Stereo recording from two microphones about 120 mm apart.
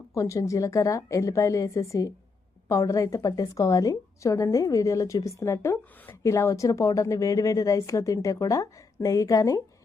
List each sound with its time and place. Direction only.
0.1 s a woman's voice: 25° left (ahead or behind)